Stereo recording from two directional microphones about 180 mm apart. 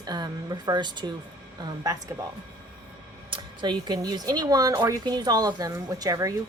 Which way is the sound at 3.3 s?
25° right (ahead or behind).